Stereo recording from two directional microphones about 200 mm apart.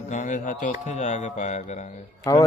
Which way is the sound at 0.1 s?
40° left (ahead or behind).